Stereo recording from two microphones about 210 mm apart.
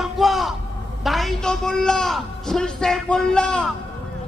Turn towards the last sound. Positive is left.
turn(degrees=5)  # may be behind; listen again after turning